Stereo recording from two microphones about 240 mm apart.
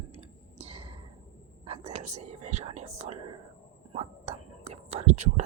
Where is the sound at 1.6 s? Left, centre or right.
Right.